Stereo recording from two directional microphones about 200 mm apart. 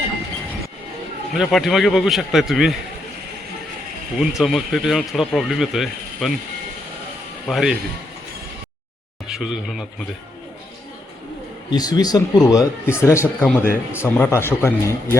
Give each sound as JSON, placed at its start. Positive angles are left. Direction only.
{"t": 1.3, "sound": "speech", "side_deg": 0}
{"t": 4.2, "sound": "speech", "side_deg": 0}
{"t": 7.4, "sound": "speech", "side_deg": 0}
{"t": 9.3, "sound": "speech", "side_deg": 0}
{"t": 11.7, "sound": "a man's voice", "side_deg": 20}